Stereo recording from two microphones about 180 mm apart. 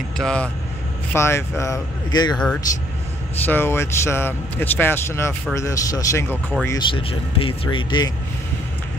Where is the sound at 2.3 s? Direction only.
5° left (ahead or behind); by 8.1 s 25° left (ahead or behind).